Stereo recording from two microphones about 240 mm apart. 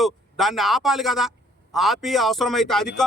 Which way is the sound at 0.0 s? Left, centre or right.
Centre.